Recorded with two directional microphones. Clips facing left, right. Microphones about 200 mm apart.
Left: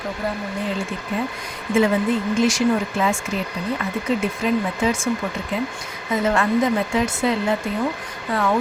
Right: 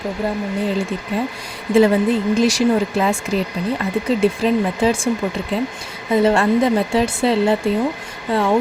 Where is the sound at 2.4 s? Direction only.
35° right (ahead or behind).